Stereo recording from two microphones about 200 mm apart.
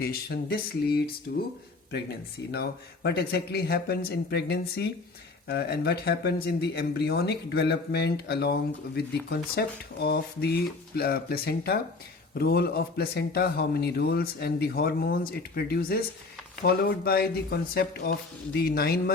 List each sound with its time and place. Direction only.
0.0 s a man's voice: 50° left (ahead or behind)
2.5 s a man's voice: 55° left (ahead or behind)